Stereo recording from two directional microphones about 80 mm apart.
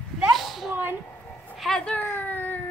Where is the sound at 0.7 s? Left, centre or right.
Right.